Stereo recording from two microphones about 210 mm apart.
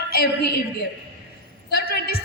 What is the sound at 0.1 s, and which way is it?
Speech, 50° left (ahead or behind).